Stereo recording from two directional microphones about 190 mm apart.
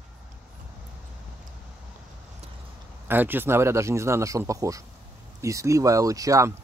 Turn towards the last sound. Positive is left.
turn(degrees=-15)  # may be behind; listen again after turning